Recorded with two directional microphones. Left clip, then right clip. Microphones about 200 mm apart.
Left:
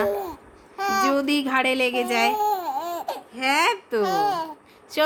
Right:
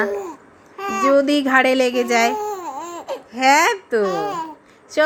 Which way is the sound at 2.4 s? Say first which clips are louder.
Left 2 dB; 10° left (ahead or behind).